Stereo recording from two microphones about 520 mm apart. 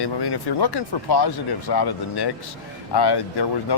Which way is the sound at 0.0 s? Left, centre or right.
Left.